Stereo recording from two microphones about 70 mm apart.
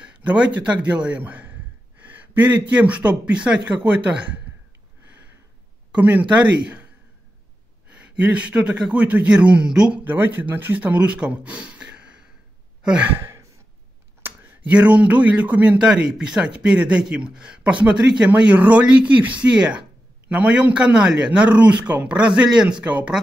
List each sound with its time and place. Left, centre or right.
0.0 s speech: centre
6.0 s speech: right
7.9 s a man's voice: centre
10.0 s speech: right
12.8 s sigh: centre
13.2 s sigh: right
14.2 s a sound: right
14.7 s speech: centre
15.8 s a man's voice: centre